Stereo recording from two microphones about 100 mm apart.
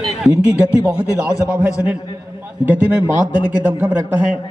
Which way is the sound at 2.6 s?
15° right (ahead or behind).